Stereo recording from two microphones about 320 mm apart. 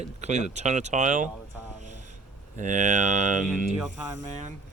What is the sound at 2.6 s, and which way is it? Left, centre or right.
Speech, right.